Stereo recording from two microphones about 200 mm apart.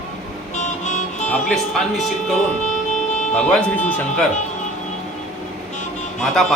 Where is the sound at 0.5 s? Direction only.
35° left (ahead or behind).